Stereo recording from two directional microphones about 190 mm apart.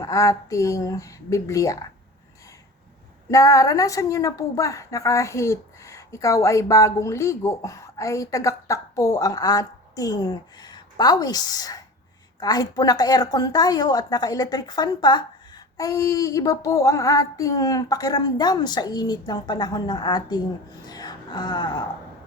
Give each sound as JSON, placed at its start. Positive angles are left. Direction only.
{"t": 0.0, "sound": "a woman's voice", "side_deg": 15}
{"t": 3.2, "sound": "a woman's voice", "side_deg": 15}
{"t": 20.8, "sound": "music", "side_deg": 20}